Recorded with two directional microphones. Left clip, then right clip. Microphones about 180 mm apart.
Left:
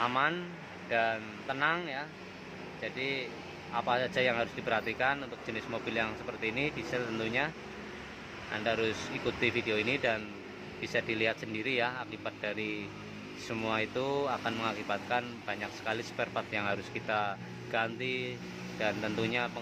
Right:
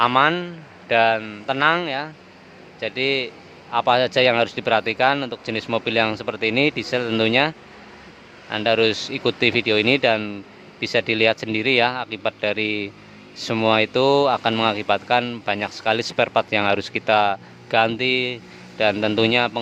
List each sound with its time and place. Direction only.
0.0 s speech: 55° right (ahead or behind)
8.5 s speech: 55° right (ahead or behind)